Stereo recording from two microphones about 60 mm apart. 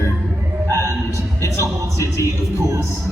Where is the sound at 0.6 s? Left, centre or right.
Right.